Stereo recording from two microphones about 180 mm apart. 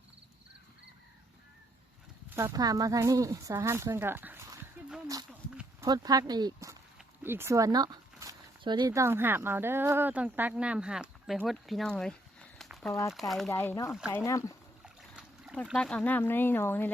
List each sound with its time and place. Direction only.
2.3 s speech: 20° right (ahead or behind)
5.8 s speech: 20° right (ahead or behind); by 12.9 s centre (ahead or behind)
12.9 s speech: 15° left (ahead or behind)
13.1 s speech: centre (ahead or behind)
13.5 s speech: 15° left (ahead or behind)
14.8 s speech: 5° right (ahead or behind); by 16.9 s 10° left (ahead or behind)